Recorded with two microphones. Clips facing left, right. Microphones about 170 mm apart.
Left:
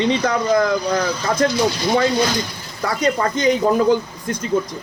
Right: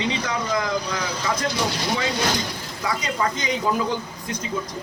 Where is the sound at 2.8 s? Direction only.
50° left (ahead or behind).